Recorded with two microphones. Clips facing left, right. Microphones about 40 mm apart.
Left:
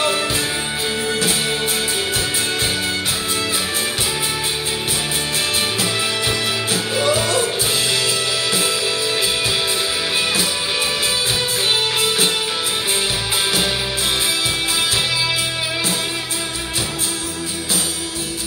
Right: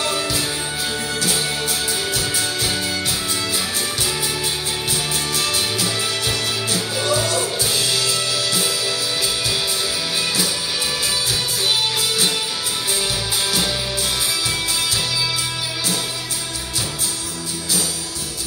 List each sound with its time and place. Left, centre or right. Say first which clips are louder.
5.8 s music: left 2 dB; left